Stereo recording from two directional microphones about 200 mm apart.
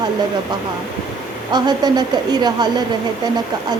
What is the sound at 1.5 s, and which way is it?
Speech, 20° right (ahead or behind).